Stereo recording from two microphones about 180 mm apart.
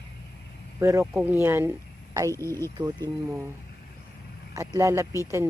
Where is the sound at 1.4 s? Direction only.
15° right (ahead or behind).